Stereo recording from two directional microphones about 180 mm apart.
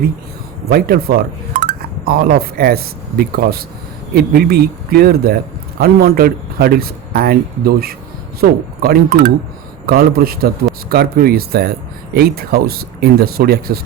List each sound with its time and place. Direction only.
0.7 s a man's voice: 55° right (ahead or behind)